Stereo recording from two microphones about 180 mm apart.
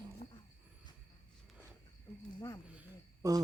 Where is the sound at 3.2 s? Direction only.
20° right (ahead or behind).